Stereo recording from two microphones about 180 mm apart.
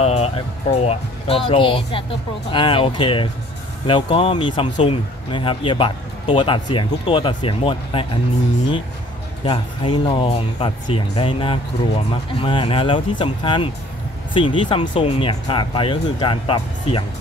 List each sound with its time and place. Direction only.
0.0 s speech: 35° left (ahead or behind)
9.4 s speech: 25° left (ahead or behind)